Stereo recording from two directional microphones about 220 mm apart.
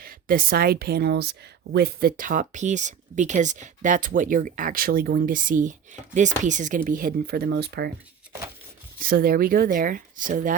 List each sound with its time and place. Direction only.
0.0 s speech: 40° right (ahead or behind)
9.0 s speech: 40° right (ahead or behind)